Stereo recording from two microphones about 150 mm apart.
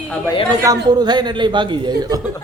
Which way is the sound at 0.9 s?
30° right (ahead or behind).